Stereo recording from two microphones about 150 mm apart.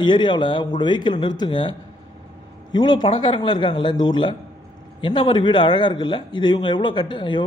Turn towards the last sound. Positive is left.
turn(degrees=30)  # may be behind; listen again after turning